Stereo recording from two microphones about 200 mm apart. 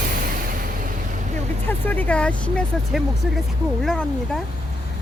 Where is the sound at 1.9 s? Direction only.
10° left (ahead or behind).